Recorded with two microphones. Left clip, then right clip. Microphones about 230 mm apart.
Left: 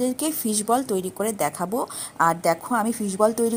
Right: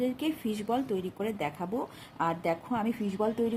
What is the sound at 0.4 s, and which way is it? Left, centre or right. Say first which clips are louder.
A woman's voice: left 12 dB; left.